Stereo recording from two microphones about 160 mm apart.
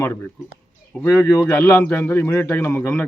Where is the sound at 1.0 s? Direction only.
15° left (ahead or behind).